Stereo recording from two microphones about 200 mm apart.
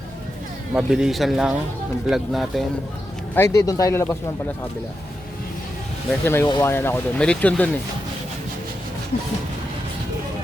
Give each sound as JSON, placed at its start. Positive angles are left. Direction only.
{"t": 0.7, "sound": "speech", "side_deg": -5}
{"t": 3.3, "sound": "speech", "side_deg": 15}
{"t": 6.2, "sound": "speech", "side_deg": 10}